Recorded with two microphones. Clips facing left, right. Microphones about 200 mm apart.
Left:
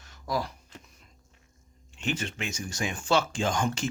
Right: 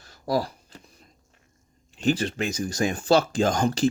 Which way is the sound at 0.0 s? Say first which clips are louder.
Right 6 dB; 35° right (ahead or behind).